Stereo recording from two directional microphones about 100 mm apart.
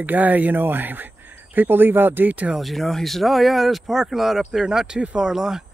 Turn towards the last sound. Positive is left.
turn(degrees=-5)  # may be behind; listen again after turning